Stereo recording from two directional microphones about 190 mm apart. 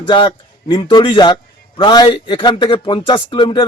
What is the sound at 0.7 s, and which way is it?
A man's voice, 25° left (ahead or behind).